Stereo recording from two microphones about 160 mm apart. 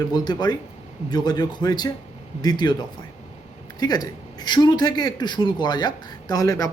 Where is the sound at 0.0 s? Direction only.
25° left (ahead or behind).